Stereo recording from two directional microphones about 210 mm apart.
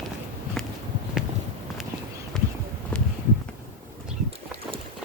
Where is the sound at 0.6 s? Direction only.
Centre (ahead or behind).